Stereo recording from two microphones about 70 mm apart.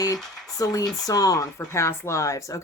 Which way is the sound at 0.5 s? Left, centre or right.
Left.